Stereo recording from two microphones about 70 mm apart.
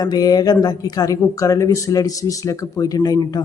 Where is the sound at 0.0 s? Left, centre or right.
Left.